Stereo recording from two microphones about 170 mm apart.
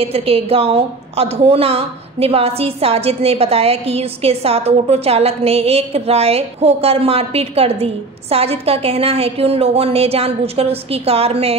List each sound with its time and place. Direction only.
0.0 s a woman's voice: 35° right (ahead or behind)